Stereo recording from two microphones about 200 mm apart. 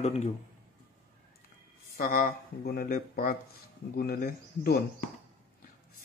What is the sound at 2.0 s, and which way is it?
Speech, 45° left (ahead or behind).